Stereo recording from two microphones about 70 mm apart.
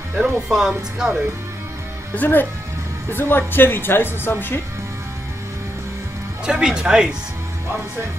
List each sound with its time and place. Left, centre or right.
0.1 s speech: centre
2.1 s a woman's voice: left
6.4 s speech: centre